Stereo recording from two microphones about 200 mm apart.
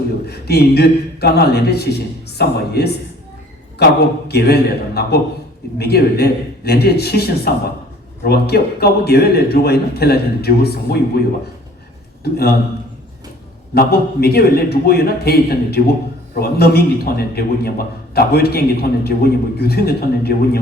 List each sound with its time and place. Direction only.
0.3 s a man's voice: 55° left (ahead or behind)
12.2 s a man's voice: 50° left (ahead or behind)
13.7 s a man's voice: 50° left (ahead or behind)